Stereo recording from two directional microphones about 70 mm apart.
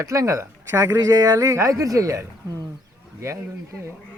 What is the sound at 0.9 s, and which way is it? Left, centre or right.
Speech, right.